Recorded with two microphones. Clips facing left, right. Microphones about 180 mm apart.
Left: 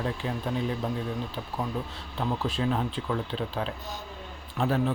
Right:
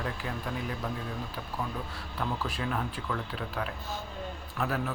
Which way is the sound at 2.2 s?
25° left (ahead or behind).